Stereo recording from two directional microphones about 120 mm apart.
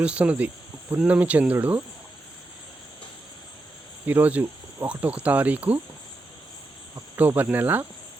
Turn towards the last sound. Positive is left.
turn(degrees=-15)  # may be behind; listen again after turning